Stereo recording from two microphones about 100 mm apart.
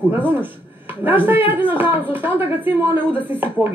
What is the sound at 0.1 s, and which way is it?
A man's voice, 20° right (ahead or behind).